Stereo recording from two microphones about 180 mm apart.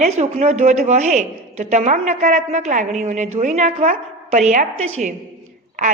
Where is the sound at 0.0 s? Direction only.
40° right (ahead or behind).